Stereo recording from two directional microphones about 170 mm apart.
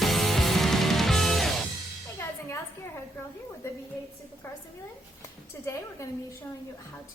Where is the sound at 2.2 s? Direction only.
15° left (ahead or behind).